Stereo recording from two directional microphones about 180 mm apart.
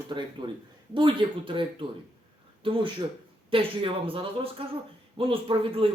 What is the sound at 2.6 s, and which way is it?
Speech, 30° right (ahead or behind).